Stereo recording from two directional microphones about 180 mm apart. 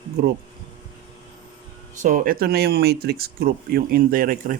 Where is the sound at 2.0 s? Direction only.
50° right (ahead or behind).